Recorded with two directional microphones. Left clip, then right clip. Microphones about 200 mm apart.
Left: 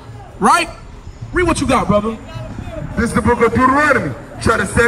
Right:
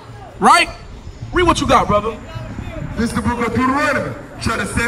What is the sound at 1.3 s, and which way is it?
Speech, 30° right (ahead or behind).